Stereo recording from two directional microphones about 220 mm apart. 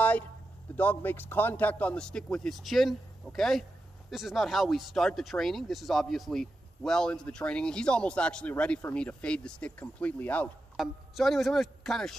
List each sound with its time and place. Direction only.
0.7 s speech: 10° left (ahead or behind)